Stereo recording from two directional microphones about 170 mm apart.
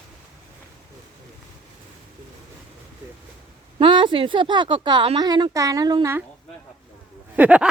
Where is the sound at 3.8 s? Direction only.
30° right (ahead or behind).